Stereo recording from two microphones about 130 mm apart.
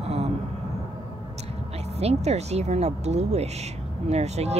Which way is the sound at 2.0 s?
55° right (ahead or behind).